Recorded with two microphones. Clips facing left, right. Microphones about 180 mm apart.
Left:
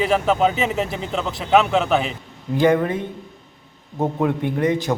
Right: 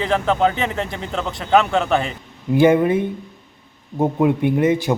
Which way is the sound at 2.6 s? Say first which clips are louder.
Right 3 dB; 15° right (ahead or behind).